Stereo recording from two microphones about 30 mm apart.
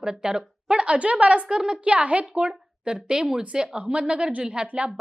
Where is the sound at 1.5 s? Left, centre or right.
Right.